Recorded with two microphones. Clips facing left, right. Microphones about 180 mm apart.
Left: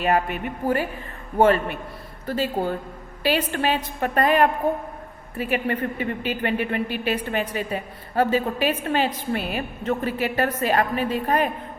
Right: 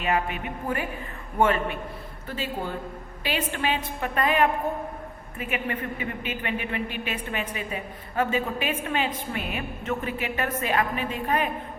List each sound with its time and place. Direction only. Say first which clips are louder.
0.0 s a woman's voice: left 4 dB; 40° left (ahead or behind)
2.2 s a woman's voice: left 7 dB; 40° left (ahead or behind)